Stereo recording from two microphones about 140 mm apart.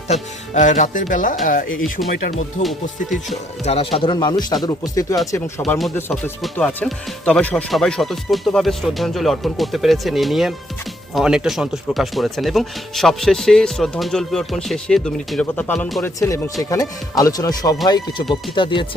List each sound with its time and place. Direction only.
0.1 s speech: 60° left (ahead or behind)
3.2 s speech: 50° left (ahead or behind); by 5.6 s 25° left (ahead or behind)
6.6 s speech: 5° left (ahead or behind); by 18.9 s 35° left (ahead or behind)